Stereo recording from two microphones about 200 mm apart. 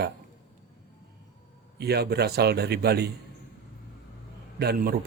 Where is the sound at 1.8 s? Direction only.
55° right (ahead or behind).